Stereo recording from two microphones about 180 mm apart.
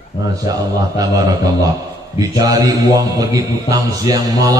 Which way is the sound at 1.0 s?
20° right (ahead or behind).